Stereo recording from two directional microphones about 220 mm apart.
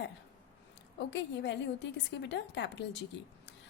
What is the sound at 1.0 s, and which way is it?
A woman's voice, 55° left (ahead or behind).